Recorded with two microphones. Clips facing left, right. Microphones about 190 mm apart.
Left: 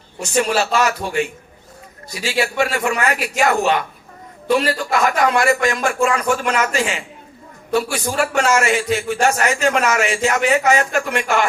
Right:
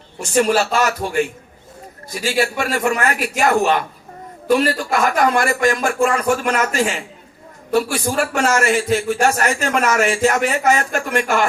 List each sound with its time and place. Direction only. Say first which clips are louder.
0.2 s a man's voice: right 2 dB; 45° right (ahead or behind)
2.2 s a man's voice: even; 45° right (ahead or behind)